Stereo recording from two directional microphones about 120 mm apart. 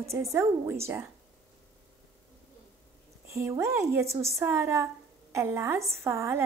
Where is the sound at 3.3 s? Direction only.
25° right (ahead or behind).